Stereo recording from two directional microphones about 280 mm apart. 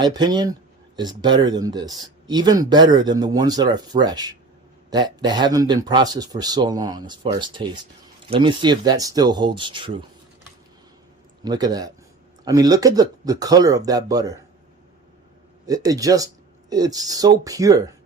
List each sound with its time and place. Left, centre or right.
0.0 s speech: centre
11.4 s speech: centre
15.6 s speech: centre